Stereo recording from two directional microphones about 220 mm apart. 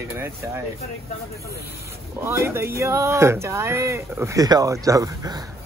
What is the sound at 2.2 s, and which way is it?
Speech, 10° right (ahead or behind).